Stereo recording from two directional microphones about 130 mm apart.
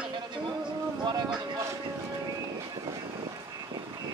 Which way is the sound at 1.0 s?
30° right (ahead or behind).